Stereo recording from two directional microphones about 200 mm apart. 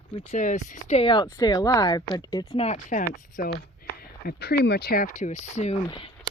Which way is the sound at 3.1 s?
45° left (ahead or behind).